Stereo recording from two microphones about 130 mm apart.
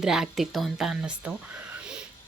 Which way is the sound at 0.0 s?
5° right (ahead or behind).